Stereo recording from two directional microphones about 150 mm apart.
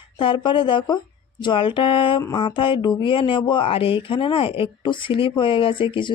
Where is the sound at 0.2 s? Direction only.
35° left (ahead or behind).